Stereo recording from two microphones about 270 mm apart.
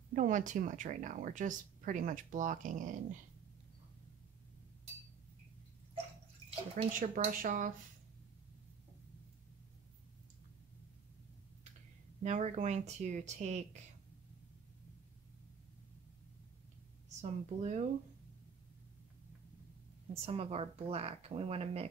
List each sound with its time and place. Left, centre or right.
0.1 s speech: right
6.7 s speech: right
12.2 s speech: right
17.1 s speech: right
20.2 s speech: right